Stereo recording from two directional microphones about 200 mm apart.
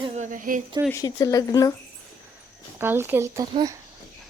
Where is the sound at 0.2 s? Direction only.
40° right (ahead or behind).